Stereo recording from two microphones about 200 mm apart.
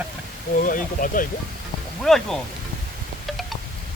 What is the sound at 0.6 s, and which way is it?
Speech, 40° left (ahead or behind).